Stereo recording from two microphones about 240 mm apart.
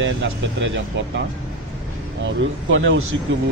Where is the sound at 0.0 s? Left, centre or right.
Right.